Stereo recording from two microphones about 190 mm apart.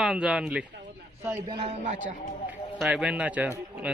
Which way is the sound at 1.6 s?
35° right (ahead or behind).